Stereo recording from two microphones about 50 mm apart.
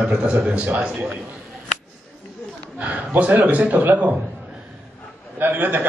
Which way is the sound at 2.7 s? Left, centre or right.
Right.